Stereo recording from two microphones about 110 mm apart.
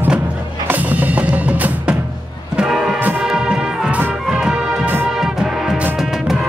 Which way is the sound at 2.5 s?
5° right (ahead or behind).